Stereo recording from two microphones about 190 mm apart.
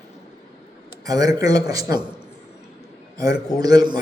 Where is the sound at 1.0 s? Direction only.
20° right (ahead or behind).